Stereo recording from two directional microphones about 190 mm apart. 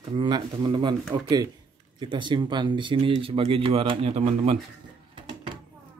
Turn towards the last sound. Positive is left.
turn(degrees=-30)  # may be behind; listen again after turning